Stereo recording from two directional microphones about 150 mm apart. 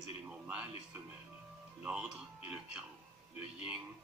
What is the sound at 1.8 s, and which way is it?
Speech, 5° right (ahead or behind).